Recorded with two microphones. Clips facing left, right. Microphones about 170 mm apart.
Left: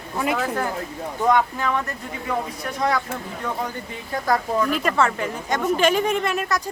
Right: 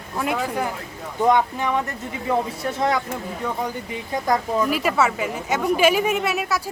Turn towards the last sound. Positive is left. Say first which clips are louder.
# even
turn(degrees=-5)  # may be behind; listen again after turning